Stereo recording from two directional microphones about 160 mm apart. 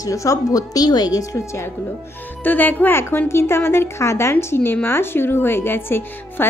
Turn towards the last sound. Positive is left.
turn(degrees=15)  # may be behind; listen again after turning